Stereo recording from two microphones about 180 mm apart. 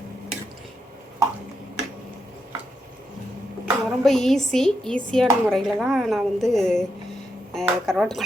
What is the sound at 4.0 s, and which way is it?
A woman's voice, centre (ahead or behind).